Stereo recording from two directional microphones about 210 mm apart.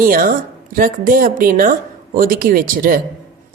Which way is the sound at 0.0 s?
40° right (ahead or behind).